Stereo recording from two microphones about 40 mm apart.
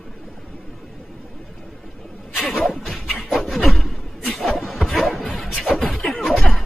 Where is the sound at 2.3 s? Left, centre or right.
Centre.